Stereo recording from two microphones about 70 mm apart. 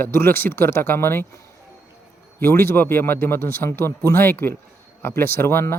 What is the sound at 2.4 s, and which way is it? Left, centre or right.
Speech, left.